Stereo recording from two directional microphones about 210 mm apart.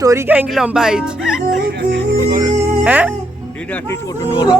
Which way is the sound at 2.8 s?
5° right (ahead or behind).